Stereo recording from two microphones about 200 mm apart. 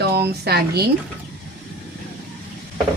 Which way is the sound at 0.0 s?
55° right (ahead or behind).